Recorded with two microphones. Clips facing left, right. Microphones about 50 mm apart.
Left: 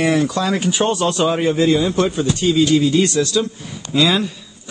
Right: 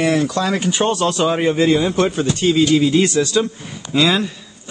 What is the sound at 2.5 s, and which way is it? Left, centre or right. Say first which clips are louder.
Speech: even; centre.